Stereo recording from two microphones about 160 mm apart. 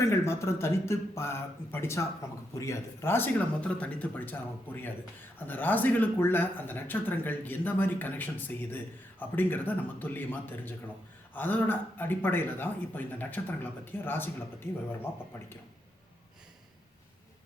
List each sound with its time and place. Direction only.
0.0 s speech: 15° left (ahead or behind)